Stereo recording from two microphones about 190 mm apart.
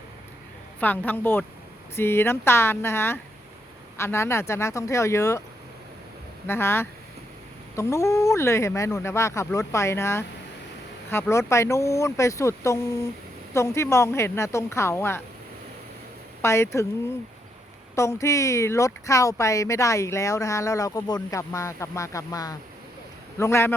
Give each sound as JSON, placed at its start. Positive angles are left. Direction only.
{"t": 0.8, "sound": "speech", "side_deg": 10}
{"t": 6.5, "sound": "speech", "side_deg": 15}
{"t": 16.4, "sound": "speech", "side_deg": 15}
{"t": 17.9, "sound": "speech", "side_deg": 15}